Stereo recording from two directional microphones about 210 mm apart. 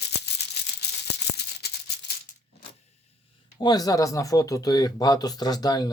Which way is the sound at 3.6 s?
20° left (ahead or behind).